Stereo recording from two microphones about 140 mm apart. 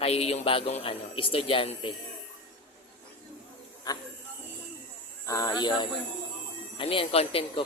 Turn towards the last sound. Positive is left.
turn(degrees=40)  # may be behind; listen again after turning